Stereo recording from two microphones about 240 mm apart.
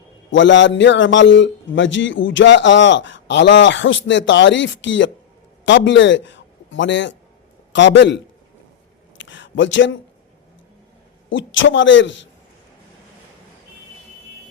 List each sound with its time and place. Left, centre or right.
0.3 s a man's voice: left
9.1 s a sound: left
11.3 s a man's voice: left